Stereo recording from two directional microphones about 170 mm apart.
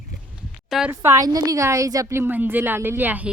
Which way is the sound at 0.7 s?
5° right (ahead or behind).